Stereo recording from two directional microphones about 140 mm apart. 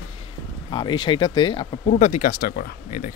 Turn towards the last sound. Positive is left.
turn(degrees=90)